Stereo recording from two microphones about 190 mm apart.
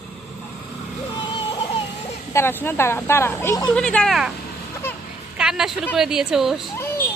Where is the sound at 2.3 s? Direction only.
10° left (ahead or behind).